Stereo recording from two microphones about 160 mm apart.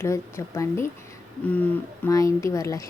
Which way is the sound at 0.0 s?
15° left (ahead or behind).